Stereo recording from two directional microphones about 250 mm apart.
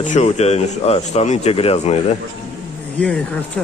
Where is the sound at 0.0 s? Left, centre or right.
Left.